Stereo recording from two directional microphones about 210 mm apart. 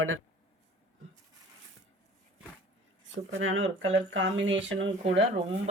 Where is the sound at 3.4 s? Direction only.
65° right (ahead or behind).